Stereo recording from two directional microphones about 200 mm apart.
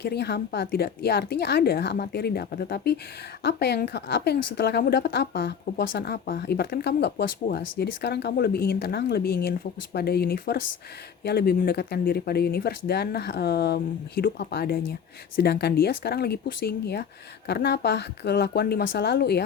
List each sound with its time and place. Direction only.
0.0 s a woman's voice: 55° left (ahead or behind)